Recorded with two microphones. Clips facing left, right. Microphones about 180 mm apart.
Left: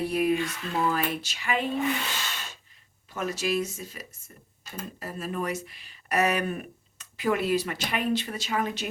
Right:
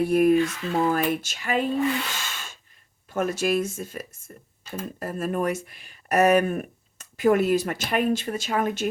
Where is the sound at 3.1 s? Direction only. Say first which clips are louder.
Right 5 dB; 50° right (ahead or behind).